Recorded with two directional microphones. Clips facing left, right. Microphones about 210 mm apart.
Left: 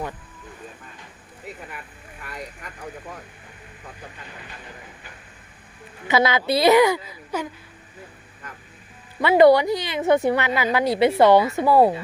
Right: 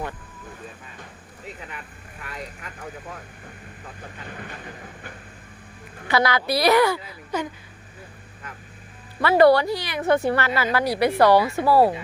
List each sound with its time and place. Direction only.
6.1 s a woman's voice: 20° left (ahead or behind)
9.2 s a woman's voice: 20° left (ahead or behind)